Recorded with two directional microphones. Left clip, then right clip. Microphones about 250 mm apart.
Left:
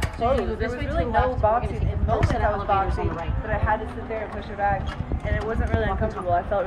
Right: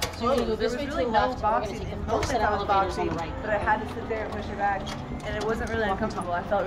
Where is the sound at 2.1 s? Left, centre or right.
Right.